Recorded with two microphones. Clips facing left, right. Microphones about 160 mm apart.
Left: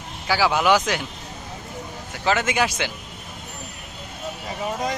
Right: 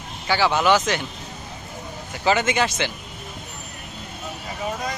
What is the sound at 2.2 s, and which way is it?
Speech, centre (ahead or behind).